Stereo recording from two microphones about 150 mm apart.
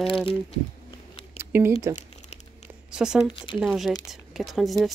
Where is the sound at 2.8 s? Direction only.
5° right (ahead or behind).